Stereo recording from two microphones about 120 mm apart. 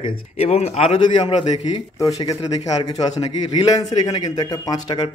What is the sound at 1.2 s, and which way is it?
Speech, 35° left (ahead or behind).